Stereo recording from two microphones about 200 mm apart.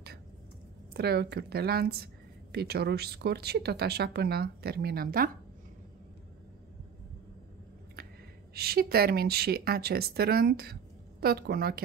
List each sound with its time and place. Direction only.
0.9 s speech: 55° right (ahead or behind)
8.5 s speech: 50° right (ahead or behind)